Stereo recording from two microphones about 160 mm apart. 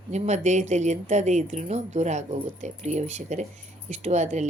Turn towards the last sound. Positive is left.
turn(degrees=-45)  # may be behind; listen again after turning